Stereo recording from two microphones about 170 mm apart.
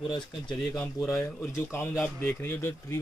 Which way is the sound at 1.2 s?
15° left (ahead or behind).